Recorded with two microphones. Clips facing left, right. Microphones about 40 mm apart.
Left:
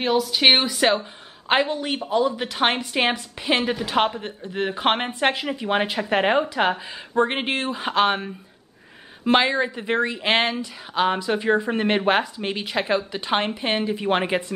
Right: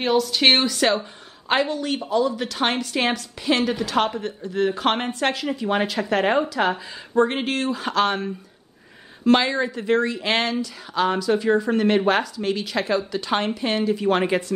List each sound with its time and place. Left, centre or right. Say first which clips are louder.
0.0 s speech: even; centre